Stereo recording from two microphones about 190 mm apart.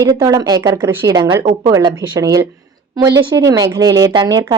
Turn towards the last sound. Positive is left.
turn(degrees=-20)  # may be behind; listen again after turning